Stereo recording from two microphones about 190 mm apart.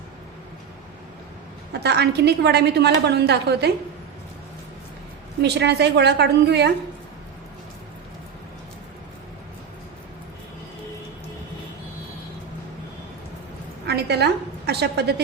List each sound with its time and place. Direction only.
1.7 s a woman's voice: 60° right (ahead or behind)
5.4 s a woman's voice: 65° right (ahead or behind)
13.8 s a sound: 60° right (ahead or behind)
14.7 s a woman's voice: 60° right (ahead or behind)